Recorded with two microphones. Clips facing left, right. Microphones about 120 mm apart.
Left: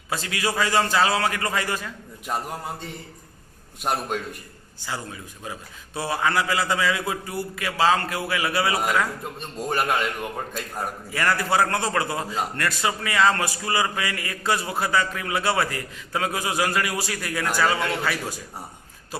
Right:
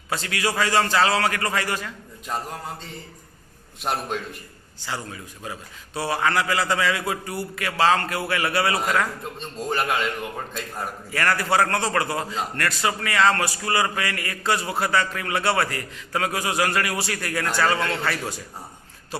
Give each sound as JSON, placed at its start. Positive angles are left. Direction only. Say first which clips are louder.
{"t": 0.1, "sound": "a man's voice", "louder": "right 1 dB", "side_deg": 15}
{"t": 3.8, "sound": "a man's voice", "louder": "left 1 dB", "side_deg": 0}
{"t": 4.8, "sound": "a man's voice", "louder": "right 1 dB", "side_deg": 15}
{"t": 11.1, "sound": "a man's voice", "louder": "right 1 dB", "side_deg": 15}